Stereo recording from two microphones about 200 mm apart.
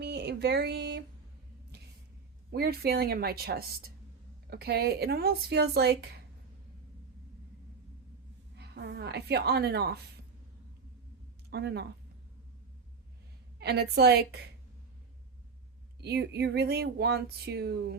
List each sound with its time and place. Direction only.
0.0 s a sound: 55° right (ahead or behind)
2.5 s speech: 50° right (ahead or behind)
8.5 s speech: 60° right (ahead or behind)
11.5 s speech: 55° right (ahead or behind)
13.6 s speech: 55° right (ahead or behind)
16.0 s speech: 55° right (ahead or behind)